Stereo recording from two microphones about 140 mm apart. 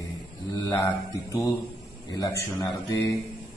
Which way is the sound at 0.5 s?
25° left (ahead or behind).